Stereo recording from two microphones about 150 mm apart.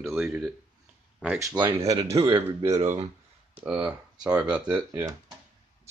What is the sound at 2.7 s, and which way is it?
Speech, 50° right (ahead or behind).